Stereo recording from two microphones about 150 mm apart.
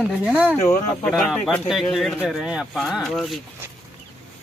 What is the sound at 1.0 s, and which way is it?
Speech, centre (ahead or behind).